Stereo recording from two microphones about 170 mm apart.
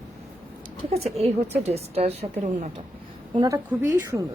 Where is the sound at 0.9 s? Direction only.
40° right (ahead or behind).